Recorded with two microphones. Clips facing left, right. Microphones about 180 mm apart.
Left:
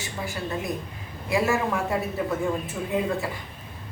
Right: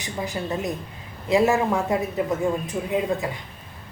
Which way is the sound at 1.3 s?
20° right (ahead or behind).